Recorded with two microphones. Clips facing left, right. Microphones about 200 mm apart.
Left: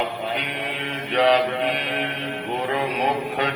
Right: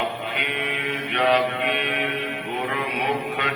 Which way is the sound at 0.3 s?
35° left (ahead or behind).